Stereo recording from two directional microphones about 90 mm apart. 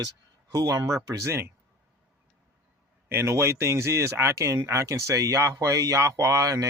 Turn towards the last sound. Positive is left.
turn(degrees=-40)  # may be behind; listen again after turning